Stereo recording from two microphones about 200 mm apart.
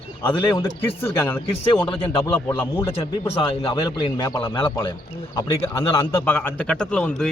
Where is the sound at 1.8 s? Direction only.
25° left (ahead or behind).